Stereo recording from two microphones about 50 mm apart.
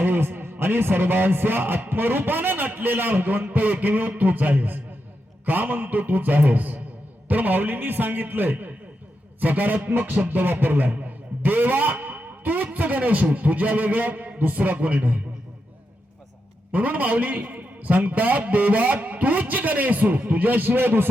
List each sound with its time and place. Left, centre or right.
0.0 s music: right
0.6 s a man's voice: right
16.7 s a man's voice: right